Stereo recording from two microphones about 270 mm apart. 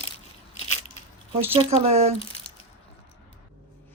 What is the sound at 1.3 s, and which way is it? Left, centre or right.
Speech, right.